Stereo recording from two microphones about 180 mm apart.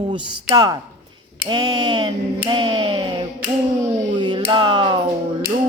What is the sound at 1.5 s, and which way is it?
Speech, 25° right (ahead or behind).